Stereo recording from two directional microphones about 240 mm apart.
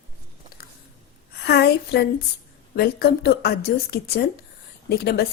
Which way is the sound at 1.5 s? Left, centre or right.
Left.